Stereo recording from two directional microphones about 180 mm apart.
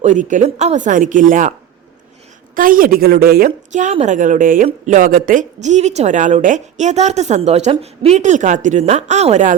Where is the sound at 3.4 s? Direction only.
40° right (ahead or behind).